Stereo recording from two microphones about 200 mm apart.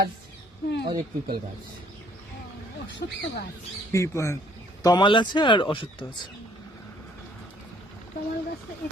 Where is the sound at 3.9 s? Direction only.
15° left (ahead or behind).